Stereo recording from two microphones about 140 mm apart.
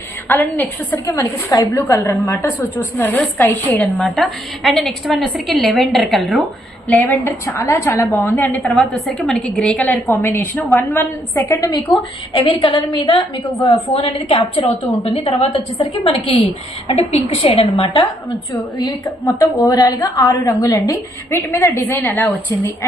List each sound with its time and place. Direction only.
0.3 s a woman's voice: 15° left (ahead or behind)
1.0 s a woman's voice: 25° left (ahead or behind); by 6.4 s centre (ahead or behind)
7.0 s a woman's voice: 15° left (ahead or behind)
8.6 s a woman's voice: centre (ahead or behind)
11.5 s a woman's voice: 25° left (ahead or behind); by 17.9 s 40° left (ahead or behind)
18.8 s a woman's voice: 20° left (ahead or behind)